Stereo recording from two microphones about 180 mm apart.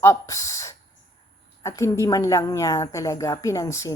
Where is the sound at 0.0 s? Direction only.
15° left (ahead or behind).